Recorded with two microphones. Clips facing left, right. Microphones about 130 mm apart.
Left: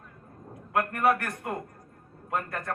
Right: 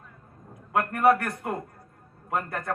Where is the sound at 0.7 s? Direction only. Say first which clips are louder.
Right 3 dB; 25° right (ahead or behind).